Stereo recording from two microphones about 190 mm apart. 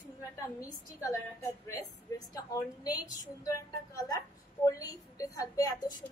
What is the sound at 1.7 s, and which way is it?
A woman's voice, 20° left (ahead or behind).